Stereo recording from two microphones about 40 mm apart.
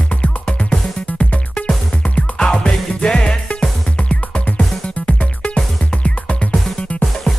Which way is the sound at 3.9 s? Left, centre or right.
Left.